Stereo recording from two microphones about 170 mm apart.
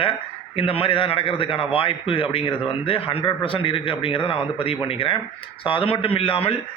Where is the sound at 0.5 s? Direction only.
30° left (ahead or behind).